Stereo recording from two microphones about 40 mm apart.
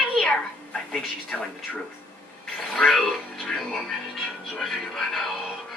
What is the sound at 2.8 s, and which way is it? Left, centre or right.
Speech, centre.